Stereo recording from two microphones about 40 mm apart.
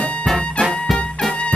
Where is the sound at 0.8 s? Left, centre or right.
Centre.